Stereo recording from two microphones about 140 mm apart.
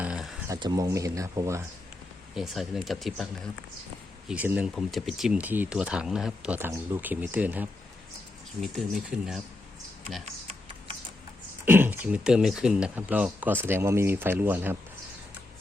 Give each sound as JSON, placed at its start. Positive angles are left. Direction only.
{"t": 0.0, "sound": "a sound", "side_deg": -5}
{"t": 0.4, "sound": "speech", "side_deg": -25}
{"t": 2.3, "sound": "speech", "side_deg": 0}
{"t": 4.3, "sound": "speech", "side_deg": -10}
{"t": 9.0, "sound": "speech", "side_deg": -5}
{"t": 11.6, "sound": "speech", "side_deg": -15}